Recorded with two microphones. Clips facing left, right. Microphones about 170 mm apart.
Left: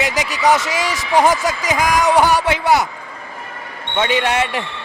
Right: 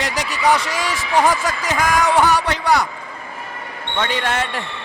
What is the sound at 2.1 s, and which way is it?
Speech, 5° left (ahead or behind).